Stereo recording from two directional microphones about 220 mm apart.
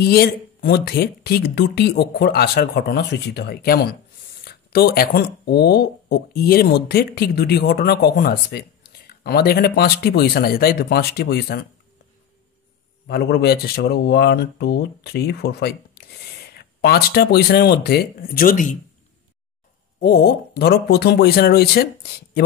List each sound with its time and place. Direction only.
0.0 s speech: 45° left (ahead or behind)
13.0 s speech: 50° left (ahead or behind)
20.0 s speech: 45° left (ahead or behind)